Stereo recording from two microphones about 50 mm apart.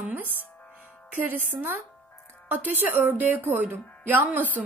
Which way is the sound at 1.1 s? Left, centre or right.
Right.